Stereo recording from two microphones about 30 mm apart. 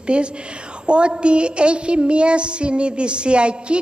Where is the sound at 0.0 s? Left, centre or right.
Right.